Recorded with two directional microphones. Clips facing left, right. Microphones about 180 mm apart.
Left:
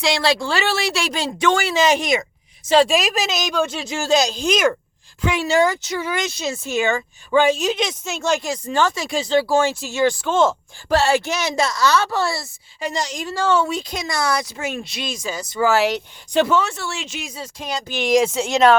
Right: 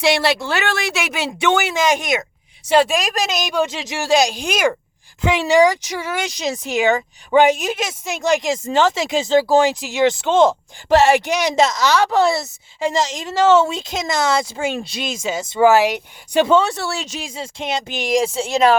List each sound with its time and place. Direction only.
0.3 s speech: centre (ahead or behind)
2.9 s speech: centre (ahead or behind)
3.5 s speech: 15° right (ahead or behind)
5.2 s speech: 20° right (ahead or behind)
5.8 s speech: 10° right (ahead or behind)
16.5 s speech: 30° right (ahead or behind)
18.0 s speech: centre (ahead or behind)